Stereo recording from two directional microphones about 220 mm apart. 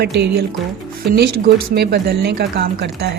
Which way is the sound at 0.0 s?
50° right (ahead or behind).